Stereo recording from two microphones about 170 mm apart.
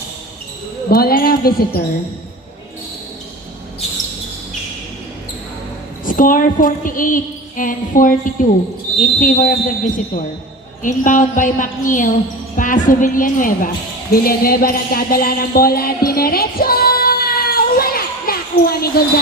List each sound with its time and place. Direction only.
0.9 s speech: 65° left (ahead or behind)
6.1 s a sound: 55° left (ahead or behind)
14.1 s speech: 60° left (ahead or behind)